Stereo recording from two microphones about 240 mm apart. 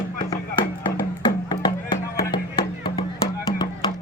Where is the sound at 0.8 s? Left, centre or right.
Centre.